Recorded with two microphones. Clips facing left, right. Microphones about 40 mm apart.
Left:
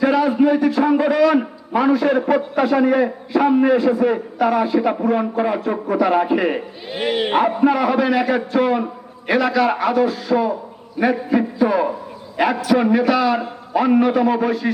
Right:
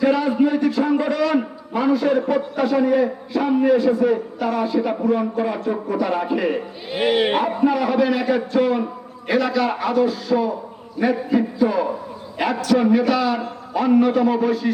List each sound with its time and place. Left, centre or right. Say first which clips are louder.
0.0 s a man's voice: left 2 dB; centre
6.8 s speech: right 3 dB; centre
7.3 s a man's voice: left 3 dB; centre